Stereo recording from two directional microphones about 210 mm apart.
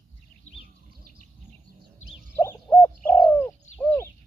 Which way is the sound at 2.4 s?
10° left (ahead or behind).